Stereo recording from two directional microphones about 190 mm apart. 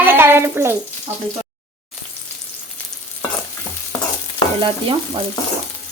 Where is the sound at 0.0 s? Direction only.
10° right (ahead or behind).